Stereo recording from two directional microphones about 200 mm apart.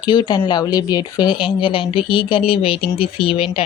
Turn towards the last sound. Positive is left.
turn(degrees=25)  # may be behind; listen again after turning